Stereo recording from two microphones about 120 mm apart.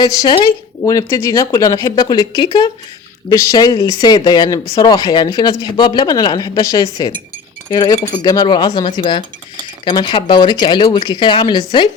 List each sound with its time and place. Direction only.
0.0 s speech: 35° left (ahead or behind)